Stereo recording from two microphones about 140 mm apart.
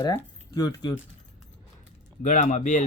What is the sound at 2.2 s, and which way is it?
Speech, 65° left (ahead or behind).